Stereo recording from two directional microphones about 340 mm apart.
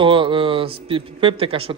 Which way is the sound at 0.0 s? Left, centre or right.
Centre.